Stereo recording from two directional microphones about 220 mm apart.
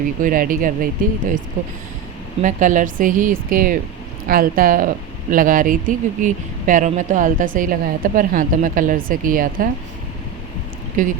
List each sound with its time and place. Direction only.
0.2 s speech: 40° right (ahead or behind)
2.4 s speech: 35° right (ahead or behind)
11.0 s speech: 35° right (ahead or behind)